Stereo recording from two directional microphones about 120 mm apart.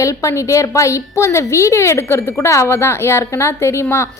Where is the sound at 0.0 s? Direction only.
25° left (ahead or behind).